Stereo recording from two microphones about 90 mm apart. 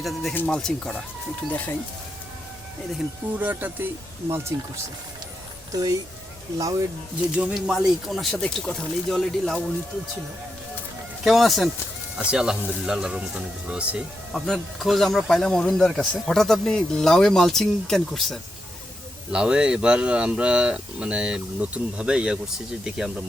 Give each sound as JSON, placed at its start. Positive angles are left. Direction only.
{"t": 0.0, "sound": "speech", "side_deg": 0}
{"t": 1.5, "sound": "speech", "side_deg": 20}
{"t": 3.3, "sound": "speech", "side_deg": -20}
{"t": 5.7, "sound": "speech", "side_deg": -40}
{"t": 7.3, "sound": "speech", "side_deg": -10}
{"t": 11.2, "sound": "speech", "side_deg": 0}
{"t": 14.3, "sound": "speech", "side_deg": 0}
{"t": 19.3, "sound": "speech", "side_deg": -10}